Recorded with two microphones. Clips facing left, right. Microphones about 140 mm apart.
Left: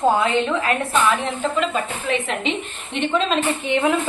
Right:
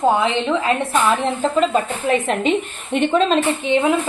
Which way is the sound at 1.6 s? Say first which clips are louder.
Right 5 dB; 40° right (ahead or behind).